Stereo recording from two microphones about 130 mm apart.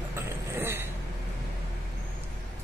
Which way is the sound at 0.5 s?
20° right (ahead or behind).